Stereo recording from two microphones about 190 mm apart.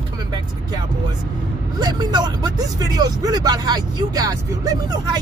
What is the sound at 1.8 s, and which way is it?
Speech, 20° right (ahead or behind).